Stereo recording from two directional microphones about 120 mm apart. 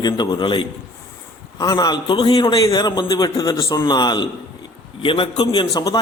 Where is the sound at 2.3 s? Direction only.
30° left (ahead or behind).